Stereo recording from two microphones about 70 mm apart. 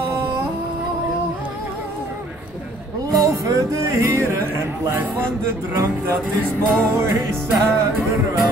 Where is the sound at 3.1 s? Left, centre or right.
Right.